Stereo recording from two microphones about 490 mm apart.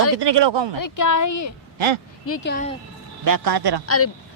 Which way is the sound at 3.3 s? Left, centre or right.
Right.